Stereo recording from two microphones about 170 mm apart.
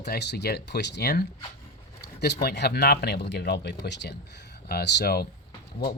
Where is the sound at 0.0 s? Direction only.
80° left.